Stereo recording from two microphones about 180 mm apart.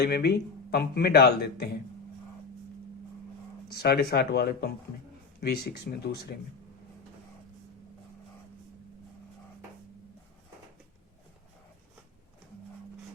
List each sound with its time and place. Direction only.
0.0 s speech: 65° left (ahead or behind)
3.7 s speech: 60° left (ahead or behind)